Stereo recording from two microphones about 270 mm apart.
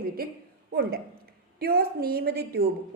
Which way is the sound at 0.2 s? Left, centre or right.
Right.